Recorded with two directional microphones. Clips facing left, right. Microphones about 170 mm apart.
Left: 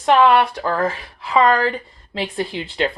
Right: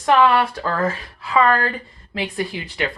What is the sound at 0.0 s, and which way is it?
Speech, 20° left (ahead or behind).